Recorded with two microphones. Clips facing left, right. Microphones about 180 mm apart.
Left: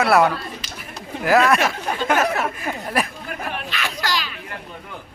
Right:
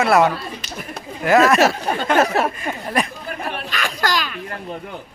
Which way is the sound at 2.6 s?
5° left (ahead or behind).